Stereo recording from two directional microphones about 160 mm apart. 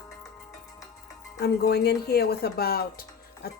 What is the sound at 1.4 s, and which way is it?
Speech, 90° left.